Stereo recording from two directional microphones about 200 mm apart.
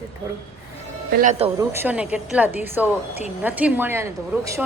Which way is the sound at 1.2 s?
35° right (ahead or behind).